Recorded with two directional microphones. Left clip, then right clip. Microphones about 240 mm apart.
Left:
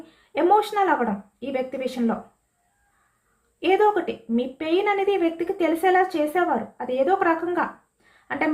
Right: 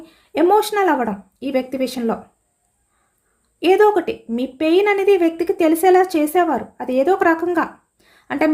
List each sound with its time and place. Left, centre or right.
0.0 s a woman's voice: right
3.6 s speech: right